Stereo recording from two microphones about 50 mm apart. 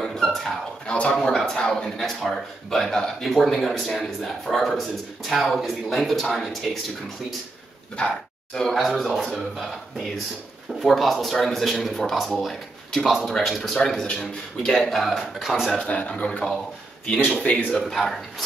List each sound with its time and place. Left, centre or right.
0.0 s a sound: centre
1.1 s a man's voice: centre
8.0 s a man's voice: left
8.5 s a man's voice: centre
15.8 s a man's voice: left
16.3 s a man's voice: centre
17.5 s a man's voice: left
17.7 s a man's voice: centre